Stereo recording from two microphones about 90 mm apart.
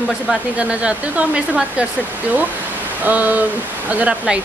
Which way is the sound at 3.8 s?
15° right (ahead or behind).